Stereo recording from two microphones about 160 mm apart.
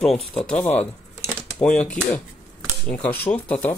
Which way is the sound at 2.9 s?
10° left (ahead or behind).